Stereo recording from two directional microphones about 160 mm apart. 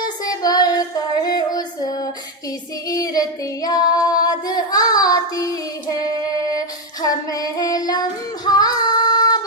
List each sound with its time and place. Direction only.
0.2 s child singing: 25° left (ahead or behind)
2.8 s female singing: 20° left (ahead or behind)
8.4 s child singing: 25° left (ahead or behind)